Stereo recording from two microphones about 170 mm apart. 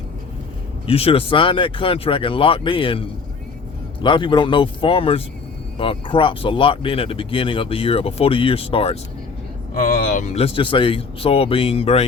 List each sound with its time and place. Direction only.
0.9 s speech: 35° left (ahead or behind)
9.8 s speech: 55° left (ahead or behind); by 12.0 s 35° left (ahead or behind)